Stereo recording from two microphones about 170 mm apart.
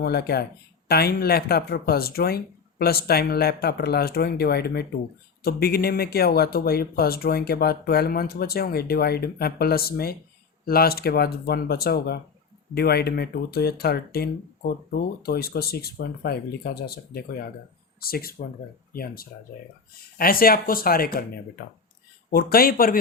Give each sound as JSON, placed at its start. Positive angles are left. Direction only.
{"t": 0.0, "sound": "speech", "side_deg": 65}